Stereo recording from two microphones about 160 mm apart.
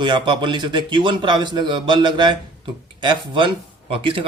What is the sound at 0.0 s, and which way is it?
A man's voice, 30° right (ahead or behind).